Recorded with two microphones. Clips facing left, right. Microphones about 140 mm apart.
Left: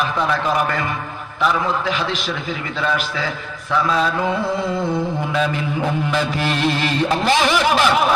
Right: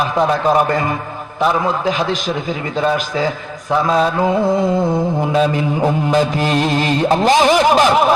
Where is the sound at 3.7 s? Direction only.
40° right (ahead or behind).